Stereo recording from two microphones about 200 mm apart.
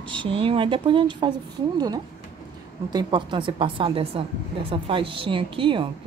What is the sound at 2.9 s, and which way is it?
A woman's voice, 20° right (ahead or behind).